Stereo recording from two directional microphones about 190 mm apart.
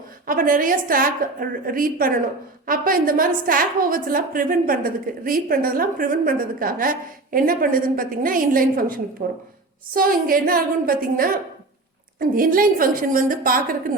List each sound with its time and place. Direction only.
0.3 s a woman's voice: 45° right (ahead or behind)